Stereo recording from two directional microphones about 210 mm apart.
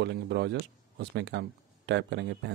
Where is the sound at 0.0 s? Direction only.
55° right (ahead or behind).